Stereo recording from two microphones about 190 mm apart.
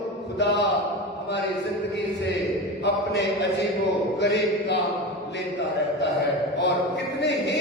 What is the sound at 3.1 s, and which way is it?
Speech, 65° left (ahead or behind).